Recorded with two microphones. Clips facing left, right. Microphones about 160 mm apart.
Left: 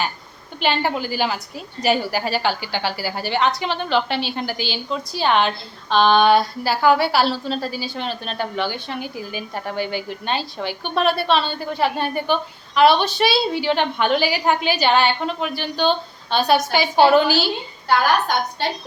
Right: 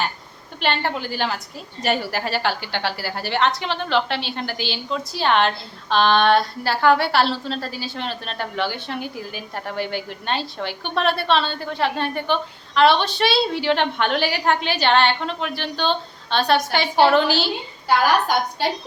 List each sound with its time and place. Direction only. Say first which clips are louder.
0.6 s a woman's voice: left 2 dB; 5° left (ahead or behind)
18.6 s a woman's voice: right 1 dB; 10° right (ahead or behind)